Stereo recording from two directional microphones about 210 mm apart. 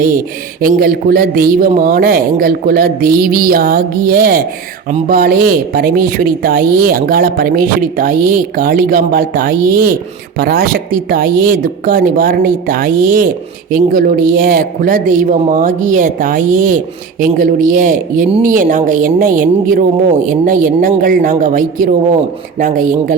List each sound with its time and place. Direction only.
0.6 s a woman's voice: 45° right (ahead or behind)